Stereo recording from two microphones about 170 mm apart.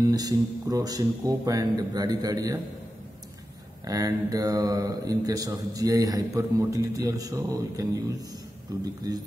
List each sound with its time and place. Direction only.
0.0 s speech: 20° right (ahead or behind)
3.8 s speech: 20° right (ahead or behind)